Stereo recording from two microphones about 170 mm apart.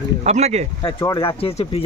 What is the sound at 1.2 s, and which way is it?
Speech, 30° left (ahead or behind).